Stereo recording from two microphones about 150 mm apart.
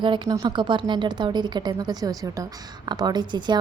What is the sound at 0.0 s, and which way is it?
A woman's voice, 30° right (ahead or behind).